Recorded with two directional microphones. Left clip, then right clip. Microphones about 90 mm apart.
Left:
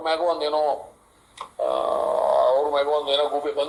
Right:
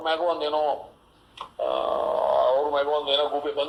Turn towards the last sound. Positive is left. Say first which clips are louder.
# left 2 dB
turn(degrees=30)  # may be behind; listen again after turning